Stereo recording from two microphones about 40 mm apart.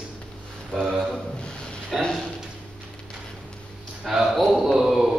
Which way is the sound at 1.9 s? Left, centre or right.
Centre.